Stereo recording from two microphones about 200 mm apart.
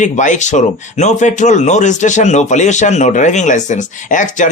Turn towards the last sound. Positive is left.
turn(degrees=40)  # may be behind; listen again after turning